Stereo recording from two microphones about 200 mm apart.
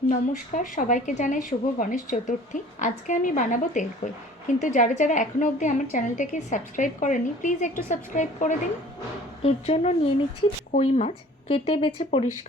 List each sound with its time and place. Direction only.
0.1 s a woman's voice: 40° left (ahead or behind)